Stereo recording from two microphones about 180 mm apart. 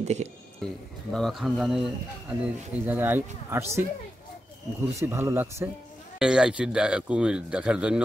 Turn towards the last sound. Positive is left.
turn(degrees=-5)  # may be behind; listen again after turning